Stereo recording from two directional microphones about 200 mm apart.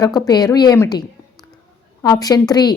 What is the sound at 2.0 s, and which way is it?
Speech, 20° left (ahead or behind).